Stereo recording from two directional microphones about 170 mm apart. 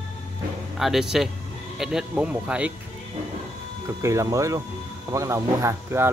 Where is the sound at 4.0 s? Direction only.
15° right (ahead or behind).